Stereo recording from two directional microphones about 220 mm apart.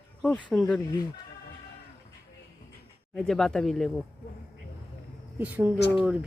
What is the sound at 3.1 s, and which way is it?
Speech, centre (ahead or behind).